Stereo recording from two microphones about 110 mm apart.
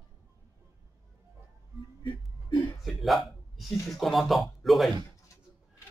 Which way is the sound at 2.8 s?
Centre (ahead or behind).